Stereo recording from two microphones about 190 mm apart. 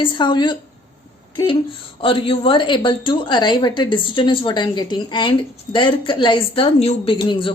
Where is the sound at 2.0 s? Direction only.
30° left (ahead or behind).